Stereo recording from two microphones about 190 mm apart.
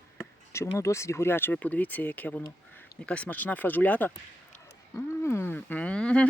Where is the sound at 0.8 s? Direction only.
15° left (ahead or behind).